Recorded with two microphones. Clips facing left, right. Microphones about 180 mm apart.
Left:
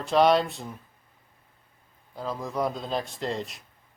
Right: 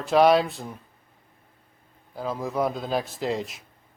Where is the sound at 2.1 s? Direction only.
5° right (ahead or behind).